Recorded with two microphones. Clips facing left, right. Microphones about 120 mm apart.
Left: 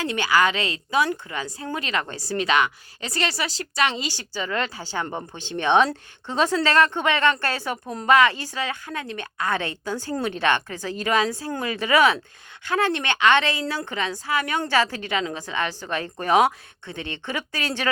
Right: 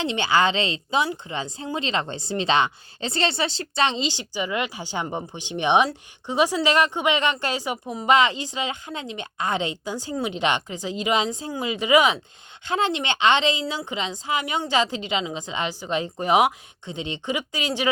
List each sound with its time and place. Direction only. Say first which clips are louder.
0.0 s a woman's voice: even; 25° right (ahead or behind)